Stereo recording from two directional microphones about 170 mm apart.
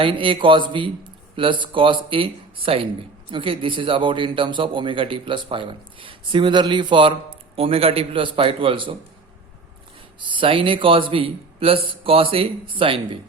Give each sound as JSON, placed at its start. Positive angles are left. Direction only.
{"t": 0.0, "sound": "a man's voice", "side_deg": -30}
{"t": 10.2, "sound": "a man's voice", "side_deg": -30}